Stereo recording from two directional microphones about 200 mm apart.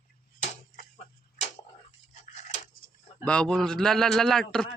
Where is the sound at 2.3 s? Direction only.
35° left (ahead or behind).